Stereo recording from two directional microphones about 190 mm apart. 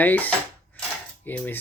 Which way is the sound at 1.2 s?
10° left (ahead or behind).